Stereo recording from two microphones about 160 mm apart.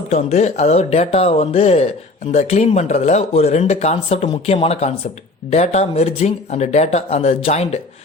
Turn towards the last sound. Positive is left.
turn(degrees=40)  # may be behind; listen again after turning